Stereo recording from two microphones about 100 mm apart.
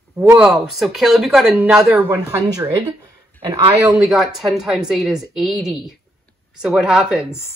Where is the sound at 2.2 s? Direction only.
35° right (ahead or behind).